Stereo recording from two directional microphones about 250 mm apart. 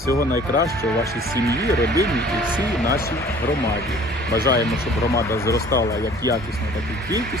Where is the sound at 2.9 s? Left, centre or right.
Left.